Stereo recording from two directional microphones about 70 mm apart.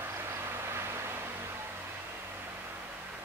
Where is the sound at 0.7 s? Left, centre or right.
Right.